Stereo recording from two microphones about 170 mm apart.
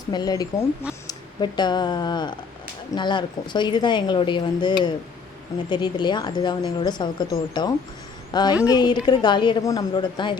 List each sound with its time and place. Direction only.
0.1 s speech: 25° left (ahead or behind)